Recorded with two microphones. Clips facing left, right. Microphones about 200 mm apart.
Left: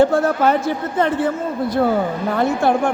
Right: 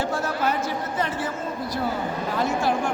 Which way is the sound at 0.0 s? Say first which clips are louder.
Left 10 dB; 55° left (ahead or behind).